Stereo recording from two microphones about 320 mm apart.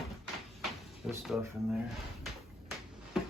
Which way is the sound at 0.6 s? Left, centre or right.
Centre.